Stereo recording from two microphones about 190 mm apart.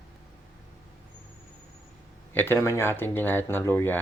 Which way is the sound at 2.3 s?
10° left (ahead or behind).